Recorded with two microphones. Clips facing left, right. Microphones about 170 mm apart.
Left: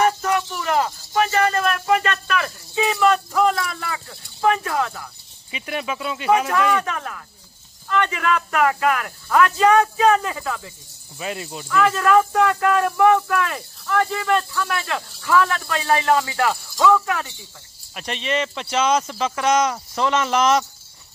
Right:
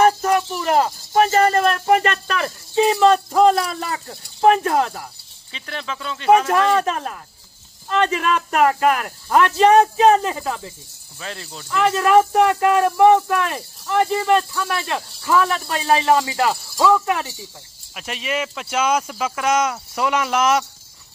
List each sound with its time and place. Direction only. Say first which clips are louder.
0.0 s a sound: right 4 dB; 30° right (ahead or behind)
0.6 s speech: right 3 dB; 35° right (ahead or behind)
5.5 s speech: left 3 dB; 10° left (ahead or behind)
6.7 s speech: right 3 dB; 25° right (ahead or behind)
11.1 s speech: left 4 dB; 10° left (ahead or behind)
11.7 s speech: right 2 dB; 25° right (ahead or behind)
17.9 s speech: left 1 dB; 5° right (ahead or behind)